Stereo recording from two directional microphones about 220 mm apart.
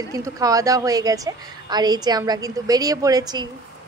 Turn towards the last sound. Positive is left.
turn(degrees=-15)  # may be behind; listen again after turning